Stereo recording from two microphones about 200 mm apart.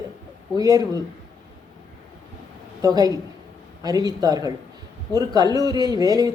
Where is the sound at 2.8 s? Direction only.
20° right (ahead or behind).